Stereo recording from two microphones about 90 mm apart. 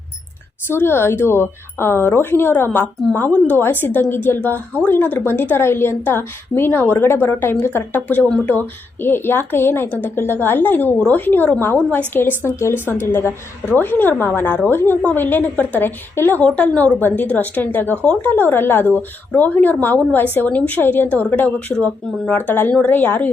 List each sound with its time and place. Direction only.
0.7 s a woman's voice: 25° left (ahead or behind)